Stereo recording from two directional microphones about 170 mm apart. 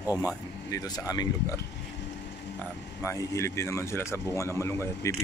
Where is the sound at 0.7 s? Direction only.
20° left (ahead or behind).